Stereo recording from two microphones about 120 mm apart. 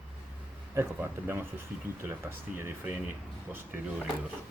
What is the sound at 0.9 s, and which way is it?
Speech, 20° right (ahead or behind).